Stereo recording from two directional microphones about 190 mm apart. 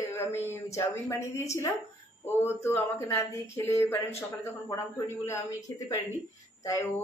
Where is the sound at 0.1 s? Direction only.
10° left (ahead or behind).